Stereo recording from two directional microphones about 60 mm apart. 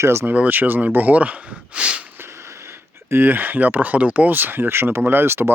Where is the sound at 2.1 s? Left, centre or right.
Right.